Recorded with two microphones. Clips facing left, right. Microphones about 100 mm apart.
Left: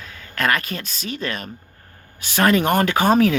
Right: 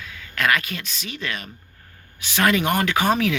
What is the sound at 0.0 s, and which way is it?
Speech, 40° left (ahead or behind).